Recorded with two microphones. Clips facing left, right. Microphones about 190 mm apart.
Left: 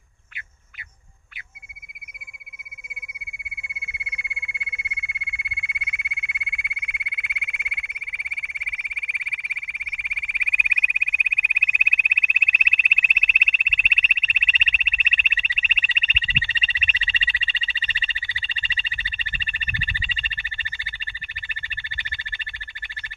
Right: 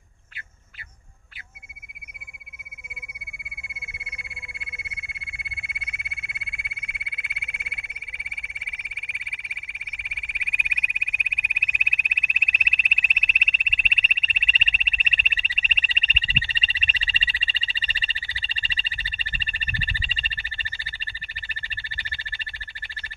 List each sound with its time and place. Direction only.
4.4 s frog: 35° right (ahead or behind)